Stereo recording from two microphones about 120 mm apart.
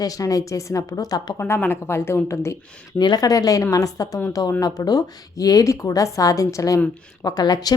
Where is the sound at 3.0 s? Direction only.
35° left (ahead or behind).